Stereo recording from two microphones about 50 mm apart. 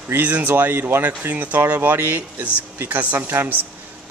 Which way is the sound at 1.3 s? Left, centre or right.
Right.